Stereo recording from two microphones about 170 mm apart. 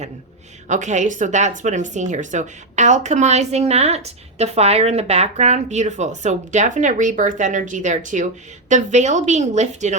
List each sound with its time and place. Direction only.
0.7 s a woman's voice: 45° right (ahead or behind)